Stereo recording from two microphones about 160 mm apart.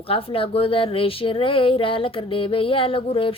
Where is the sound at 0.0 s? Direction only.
35° left (ahead or behind).